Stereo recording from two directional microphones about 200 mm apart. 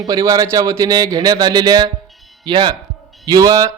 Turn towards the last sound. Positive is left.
turn(degrees=-20)  # may be behind; listen again after turning